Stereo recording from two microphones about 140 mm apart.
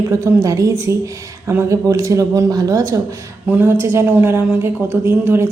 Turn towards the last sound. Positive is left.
turn(degrees=-15)  # may be behind; listen again after turning